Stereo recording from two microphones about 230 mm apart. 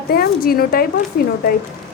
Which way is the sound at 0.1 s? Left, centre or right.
Left.